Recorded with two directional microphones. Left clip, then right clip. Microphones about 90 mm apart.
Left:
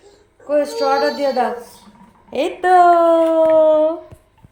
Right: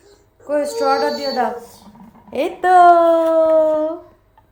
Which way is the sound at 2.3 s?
10° left (ahead or behind).